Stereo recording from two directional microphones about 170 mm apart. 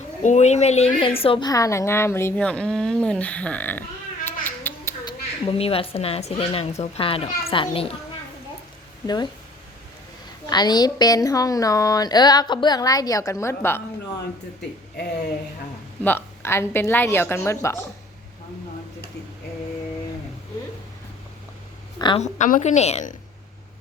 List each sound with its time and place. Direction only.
0.2 s a woman's voice: 45° left (ahead or behind); by 3.8 s 10° left (ahead or behind)
4.3 s a sound: 10° left (ahead or behind)
5.0 s a woman's voice: 35° left (ahead or behind)
9.0 s a woman's voice: 25° left (ahead or behind)
10.5 s a woman's voice: 25° left (ahead or behind)
16.0 s a woman's voice: 15° left (ahead or behind)
21.9 s a woman's voice: 25° left (ahead or behind)
22.2 s a woman's voice: 50° left (ahead or behind)